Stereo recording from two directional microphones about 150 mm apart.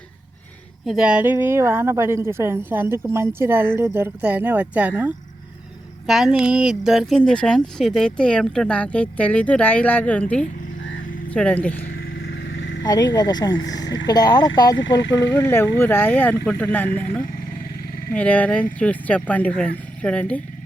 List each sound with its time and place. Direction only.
0.9 s a woman's voice: 5° right (ahead or behind)
11.9 s vehicle: 90° left
12.8 s speech: 25° left (ahead or behind); by 20.4 s 10° left (ahead or behind)